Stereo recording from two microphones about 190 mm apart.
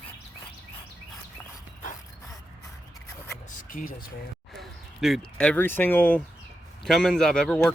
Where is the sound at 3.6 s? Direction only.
45° left (ahead or behind).